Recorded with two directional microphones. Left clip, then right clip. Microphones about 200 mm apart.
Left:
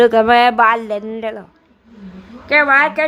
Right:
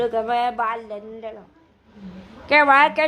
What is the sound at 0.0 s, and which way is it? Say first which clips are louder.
A woman's voice: left 11 dB; 25° left (ahead or behind).